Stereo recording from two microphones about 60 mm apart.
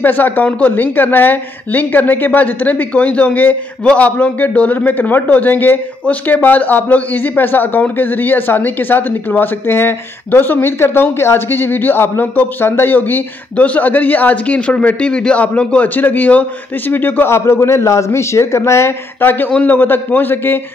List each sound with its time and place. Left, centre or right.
0.0 s a man's voice: left
17.3 s a man's voice: left